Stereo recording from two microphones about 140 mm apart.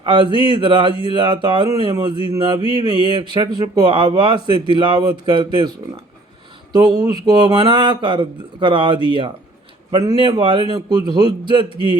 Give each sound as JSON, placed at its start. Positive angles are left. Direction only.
{"t": 0.0, "sound": "speech", "side_deg": -35}
{"t": 6.7, "sound": "speech", "side_deg": -30}